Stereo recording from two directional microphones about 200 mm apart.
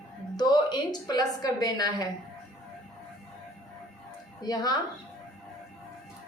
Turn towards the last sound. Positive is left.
turn(degrees=20)  # may be behind; listen again after turning